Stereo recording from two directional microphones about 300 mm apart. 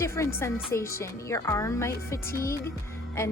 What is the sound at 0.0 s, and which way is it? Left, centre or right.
A woman's voice, centre.